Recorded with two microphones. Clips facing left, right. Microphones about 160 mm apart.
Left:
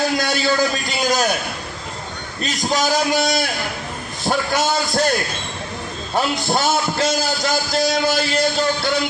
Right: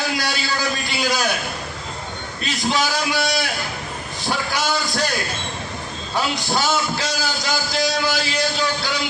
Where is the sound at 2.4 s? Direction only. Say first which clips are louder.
Left 2 dB; 45° left (ahead or behind).